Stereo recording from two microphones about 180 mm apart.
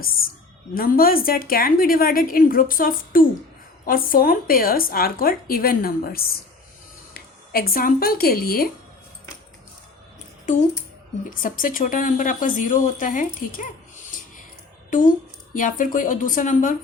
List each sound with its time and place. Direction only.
0.7 s a woman's voice: 55° left (ahead or behind)
11.3 s a woman's voice: 50° left (ahead or behind)
14.8 s a sound: 50° left (ahead or behind)
15.5 s a woman's voice: 50° left (ahead or behind)